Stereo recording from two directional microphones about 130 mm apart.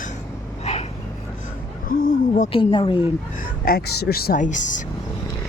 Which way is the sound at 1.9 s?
90° left.